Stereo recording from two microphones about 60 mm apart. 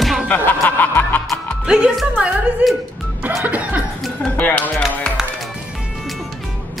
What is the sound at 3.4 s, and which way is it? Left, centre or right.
Chuckle, right.